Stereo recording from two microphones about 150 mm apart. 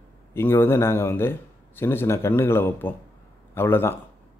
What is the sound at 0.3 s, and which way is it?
A man's voice, 15° left (ahead or behind).